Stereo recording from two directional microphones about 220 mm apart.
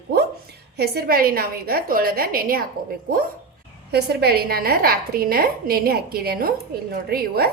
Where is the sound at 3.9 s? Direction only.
45° right (ahead or behind).